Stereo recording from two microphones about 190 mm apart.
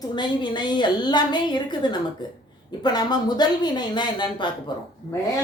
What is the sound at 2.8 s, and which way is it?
Speech, 20° left (ahead or behind).